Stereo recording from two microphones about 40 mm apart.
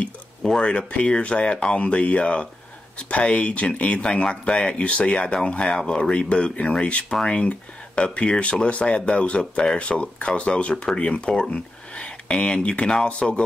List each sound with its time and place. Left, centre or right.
0.6 s speech: left
11.2 s speech: centre
11.5 s speech: left